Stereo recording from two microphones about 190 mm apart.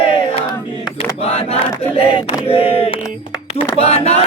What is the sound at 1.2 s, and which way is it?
Speech, 35° left (ahead or behind).